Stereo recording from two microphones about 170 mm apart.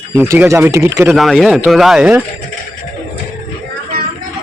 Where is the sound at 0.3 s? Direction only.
15° right (ahead or behind).